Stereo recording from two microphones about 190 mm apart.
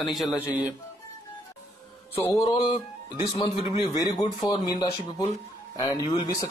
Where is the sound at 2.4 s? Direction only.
30° left (ahead or behind).